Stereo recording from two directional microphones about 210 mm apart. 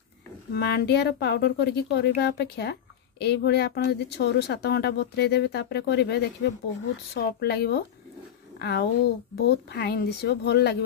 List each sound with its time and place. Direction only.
0.6 s speech: 50° left (ahead or behind)